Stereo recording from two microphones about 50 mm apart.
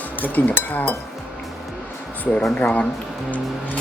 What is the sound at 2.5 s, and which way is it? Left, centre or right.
Speech, left.